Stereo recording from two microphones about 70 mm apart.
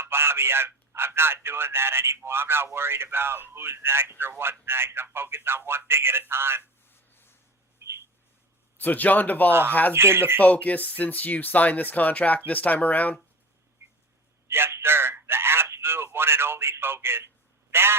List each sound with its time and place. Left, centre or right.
0.0 s a man's voice: right
7.1 s a sound: left
7.8 s a sound: right
8.8 s speech: left
9.5 s a man's voice: right
10.4 s speech: left
14.4 s telephone: right